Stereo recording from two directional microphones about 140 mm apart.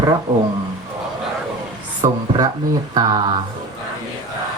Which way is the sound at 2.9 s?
30° right (ahead or behind).